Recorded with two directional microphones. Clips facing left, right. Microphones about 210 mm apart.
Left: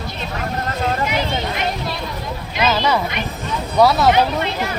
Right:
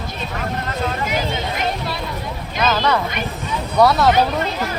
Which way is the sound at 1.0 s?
45° right (ahead or behind).